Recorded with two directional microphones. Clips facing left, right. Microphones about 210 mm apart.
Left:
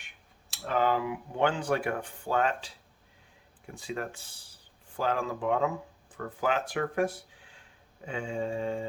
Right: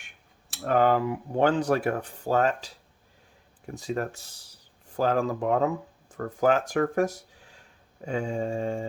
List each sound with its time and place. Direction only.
0.5 s speech: 50° right (ahead or behind)
3.8 s speech: 40° right (ahead or behind)
8.0 s mantra: 40° right (ahead or behind)